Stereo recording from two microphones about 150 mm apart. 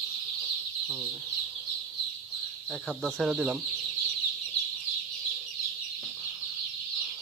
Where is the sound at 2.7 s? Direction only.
Centre (ahead or behind).